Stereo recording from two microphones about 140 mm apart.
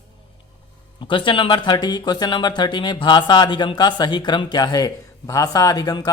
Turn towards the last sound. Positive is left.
turn(degrees=30)  # may be behind; listen again after turning